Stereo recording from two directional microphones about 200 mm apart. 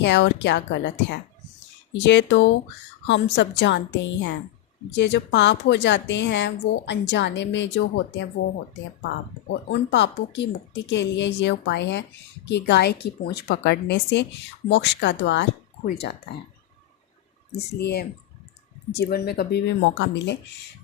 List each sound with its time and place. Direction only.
0.0 s a woman's voice: 60° left (ahead or behind)
9.9 s a woman's voice: 60° left (ahead or behind)
17.7 s a woman's voice: 55° left (ahead or behind)